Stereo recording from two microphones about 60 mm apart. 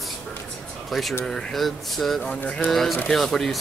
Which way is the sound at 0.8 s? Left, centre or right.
Centre.